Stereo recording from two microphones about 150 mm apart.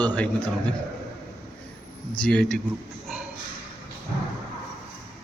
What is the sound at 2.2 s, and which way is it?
Speech, 5° left (ahead or behind).